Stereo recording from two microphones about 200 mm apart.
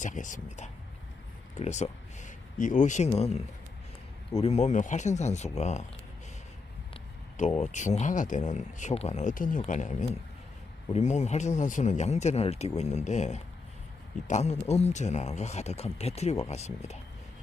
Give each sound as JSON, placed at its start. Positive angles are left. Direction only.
{"t": 0.0, "sound": "speech", "side_deg": 40}
{"t": 6.9, "sound": "speech", "side_deg": 35}